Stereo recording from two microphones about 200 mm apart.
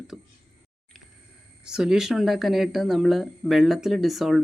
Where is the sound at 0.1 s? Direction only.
Centre (ahead or behind).